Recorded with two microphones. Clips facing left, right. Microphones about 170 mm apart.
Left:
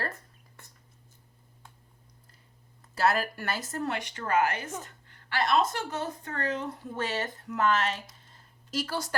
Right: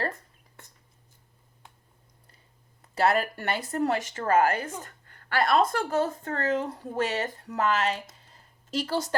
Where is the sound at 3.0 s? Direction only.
30° right (ahead or behind).